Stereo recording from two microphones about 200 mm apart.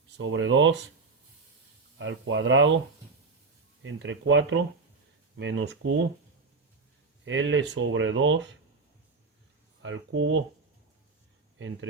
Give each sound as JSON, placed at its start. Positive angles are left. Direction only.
{"t": 0.2, "sound": "speech", "side_deg": -70}
{"t": 2.0, "sound": "speech", "side_deg": -70}
{"t": 3.8, "sound": "speech", "side_deg": -70}
{"t": 7.3, "sound": "speech", "side_deg": -65}
{"t": 9.8, "sound": "speech", "side_deg": -70}
{"t": 11.5, "sound": "speech", "side_deg": -70}